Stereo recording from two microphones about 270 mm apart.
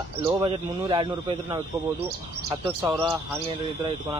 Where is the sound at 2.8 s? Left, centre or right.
Centre.